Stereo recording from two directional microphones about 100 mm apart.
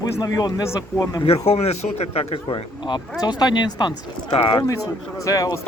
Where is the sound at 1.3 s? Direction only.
90° left.